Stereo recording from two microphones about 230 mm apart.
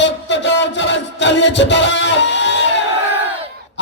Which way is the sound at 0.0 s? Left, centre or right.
Left.